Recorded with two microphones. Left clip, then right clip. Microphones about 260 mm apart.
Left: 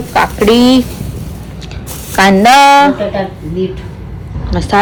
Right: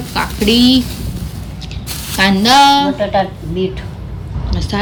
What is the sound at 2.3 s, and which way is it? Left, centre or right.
Speech, centre.